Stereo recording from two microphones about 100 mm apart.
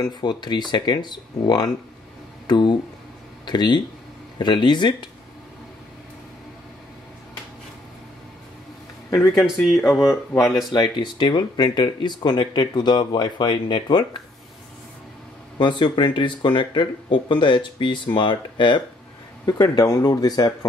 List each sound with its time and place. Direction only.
0.0 s speech: 45° left (ahead or behind)
9.3 s speech: centre (ahead or behind)
10.4 s speech: 40° left (ahead or behind)
15.6 s speech: 55° left (ahead or behind)
19.4 s speech: 40° left (ahead or behind)